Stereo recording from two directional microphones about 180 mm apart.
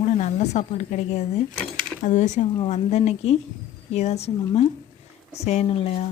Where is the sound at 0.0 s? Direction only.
40° left (ahead or behind).